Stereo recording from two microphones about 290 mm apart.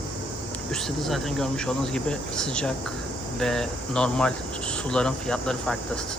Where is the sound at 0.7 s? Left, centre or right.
Centre.